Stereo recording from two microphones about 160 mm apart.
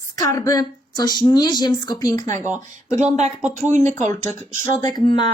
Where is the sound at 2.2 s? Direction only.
50° right (ahead or behind).